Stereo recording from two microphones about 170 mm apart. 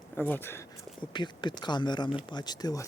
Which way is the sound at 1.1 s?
25° left (ahead or behind).